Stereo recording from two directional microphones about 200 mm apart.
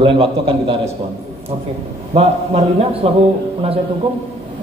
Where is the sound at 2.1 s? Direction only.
30° right (ahead or behind).